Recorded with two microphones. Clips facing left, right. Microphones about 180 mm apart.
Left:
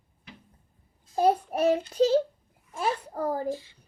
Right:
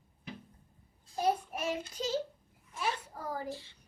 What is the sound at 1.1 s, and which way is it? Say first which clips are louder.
A child's voice: left 8 dB; 60° left (ahead or behind).